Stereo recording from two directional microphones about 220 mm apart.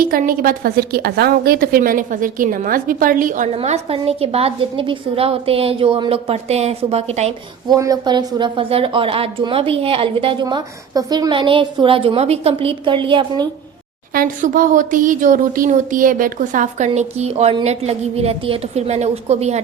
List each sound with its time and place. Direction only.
0.0 s a woman's voice: 40° right (ahead or behind)
7.7 s a woman's voice: 15° right (ahead or behind)
14.1 s a woman's voice: 40° right (ahead or behind)